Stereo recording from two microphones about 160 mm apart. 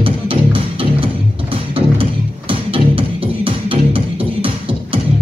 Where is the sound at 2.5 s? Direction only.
35° right (ahead or behind).